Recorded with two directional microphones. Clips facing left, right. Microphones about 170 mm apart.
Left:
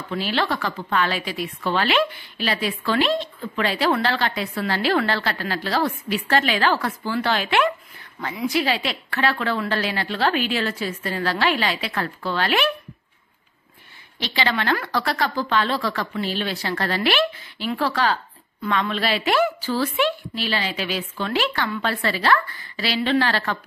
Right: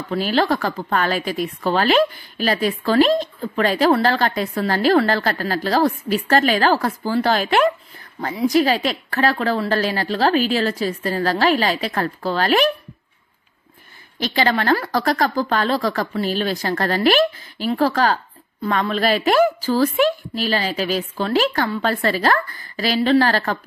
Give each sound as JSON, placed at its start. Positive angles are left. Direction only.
{"t": 0.1, "sound": "a woman's voice", "side_deg": -40}
{"t": 14.2, "sound": "a woman's voice", "side_deg": -45}